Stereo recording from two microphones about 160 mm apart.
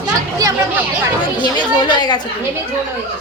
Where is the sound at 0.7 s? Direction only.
10° right (ahead or behind).